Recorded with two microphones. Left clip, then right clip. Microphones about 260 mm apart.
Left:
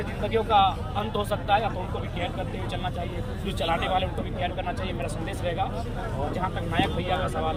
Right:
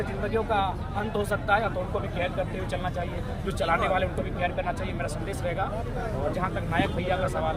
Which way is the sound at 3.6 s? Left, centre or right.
Centre.